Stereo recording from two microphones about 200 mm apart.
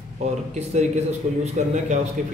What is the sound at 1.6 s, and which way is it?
Speech, 35° right (ahead or behind).